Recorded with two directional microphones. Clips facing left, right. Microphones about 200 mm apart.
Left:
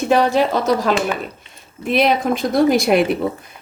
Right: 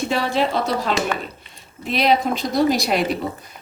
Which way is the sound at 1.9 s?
50° left (ahead or behind).